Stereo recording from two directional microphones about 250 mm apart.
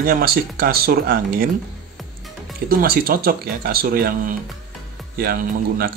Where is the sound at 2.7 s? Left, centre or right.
Right.